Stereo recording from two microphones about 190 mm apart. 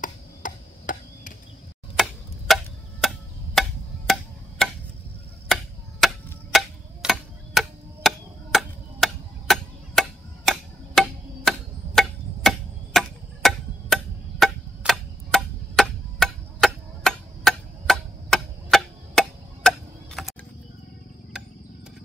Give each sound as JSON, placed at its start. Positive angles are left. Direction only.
{"t": 0.0, "sound": "tick-tock", "side_deg": 45}
{"t": 2.0, "sound": "tick-tock", "side_deg": 0}
{"t": 3.6, "sound": "a sound", "side_deg": 0}
{"t": 5.5, "sound": "tick-tock", "side_deg": 0}